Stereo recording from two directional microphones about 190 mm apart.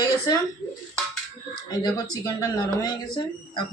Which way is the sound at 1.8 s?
20° left (ahead or behind).